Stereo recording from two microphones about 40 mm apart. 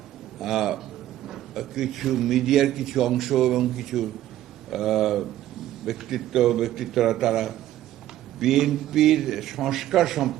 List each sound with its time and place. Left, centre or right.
0.3 s a man's voice: centre